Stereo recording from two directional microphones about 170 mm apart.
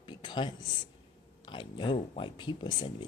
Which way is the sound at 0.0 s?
30° left (ahead or behind).